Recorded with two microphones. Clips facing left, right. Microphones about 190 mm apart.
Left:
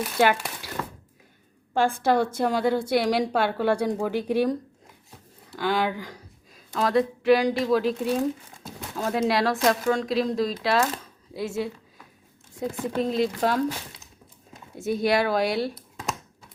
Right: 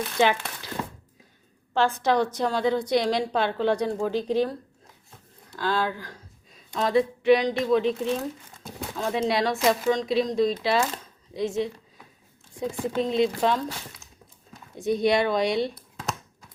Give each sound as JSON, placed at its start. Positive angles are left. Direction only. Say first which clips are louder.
{"t": 0.0, "sound": "a woman's voice", "louder": "left 1 dB", "side_deg": 5}
{"t": 1.7, "sound": "a woman's voice", "louder": "left 1 dB", "side_deg": 10}
{"t": 5.7, "sound": "a woman's voice", "louder": "left 1 dB", "side_deg": 15}
{"t": 6.5, "sound": "speech", "louder": "even", "side_deg": 0}
{"t": 12.8, "sound": "speech", "louder": "right 1 dB", "side_deg": 0}
{"t": 14.8, "sound": "speech", "louder": "right 1 dB", "side_deg": 5}